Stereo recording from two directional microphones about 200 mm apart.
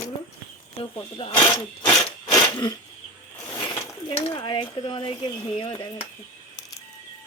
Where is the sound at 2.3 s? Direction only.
20° left (ahead or behind).